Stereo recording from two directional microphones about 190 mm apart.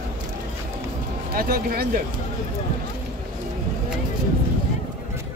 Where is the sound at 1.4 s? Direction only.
50° right (ahead or behind).